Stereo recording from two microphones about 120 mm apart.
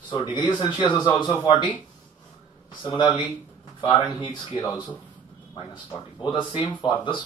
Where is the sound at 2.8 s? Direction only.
45° left (ahead or behind).